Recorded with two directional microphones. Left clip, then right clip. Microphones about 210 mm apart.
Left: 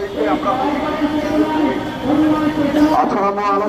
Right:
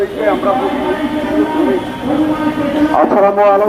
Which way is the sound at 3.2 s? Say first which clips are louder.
Right 8 dB; 45° left (ahead or behind).